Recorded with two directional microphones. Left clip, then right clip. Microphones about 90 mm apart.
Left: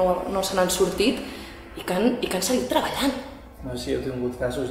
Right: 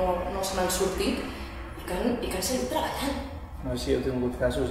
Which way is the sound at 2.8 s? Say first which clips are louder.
Left 6 dB; 35° left (ahead or behind).